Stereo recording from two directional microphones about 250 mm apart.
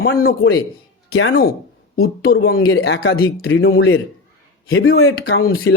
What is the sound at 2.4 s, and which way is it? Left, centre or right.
A man's voice, left.